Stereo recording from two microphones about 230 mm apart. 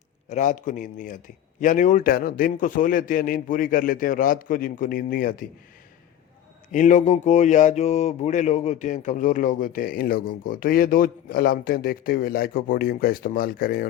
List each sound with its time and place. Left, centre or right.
0.3 s speech: left
6.7 s speech: left